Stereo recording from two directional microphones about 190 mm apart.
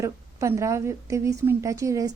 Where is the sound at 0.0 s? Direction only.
15° right (ahead or behind).